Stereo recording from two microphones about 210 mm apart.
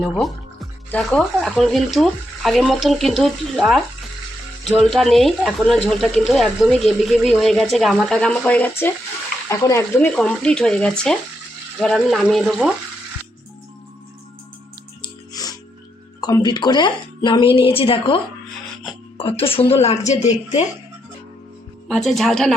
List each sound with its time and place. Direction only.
0.1 s speech: centre (ahead or behind)
4.8 s speech: centre (ahead or behind)
15.0 s music: 20° left (ahead or behind)
16.2 s speech: 20° left (ahead or behind)
21.8 s speech: centre (ahead or behind)